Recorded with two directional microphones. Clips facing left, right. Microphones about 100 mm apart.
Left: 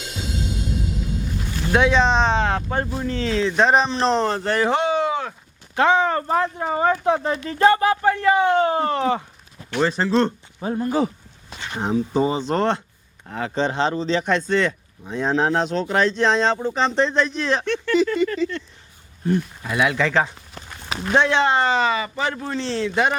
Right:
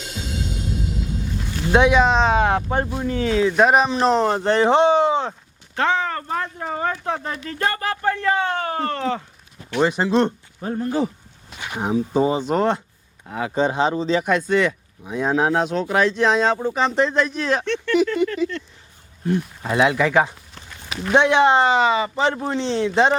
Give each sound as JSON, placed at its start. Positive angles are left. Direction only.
{"t": 1.7, "sound": "speech", "side_deg": -15}
{"t": 2.4, "sound": "speech", "side_deg": -15}
{"t": 4.4, "sound": "speech", "side_deg": -20}
{"t": 5.7, "sound": "speech", "side_deg": 15}
{"t": 6.7, "sound": "speech", "side_deg": 15}
{"t": 9.8, "sound": "speech", "side_deg": -15}
{"t": 10.6, "sound": "speech", "side_deg": 5}
{"t": 11.6, "sound": "speech", "side_deg": -10}
{"t": 19.6, "sound": "speech", "side_deg": -25}
{"t": 20.0, "sound": "speech", "side_deg": -15}
{"t": 20.6, "sound": "a sound", "side_deg": 40}
{"t": 21.1, "sound": "speech", "side_deg": -15}